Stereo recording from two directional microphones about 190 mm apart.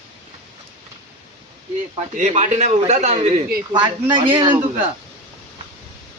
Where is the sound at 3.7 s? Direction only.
25° right (ahead or behind).